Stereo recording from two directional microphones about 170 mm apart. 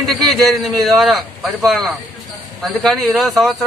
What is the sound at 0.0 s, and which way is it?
A man's voice, centre (ahead or behind).